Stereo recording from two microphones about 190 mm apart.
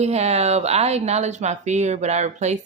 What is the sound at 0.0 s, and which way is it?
Speech, 35° right (ahead or behind).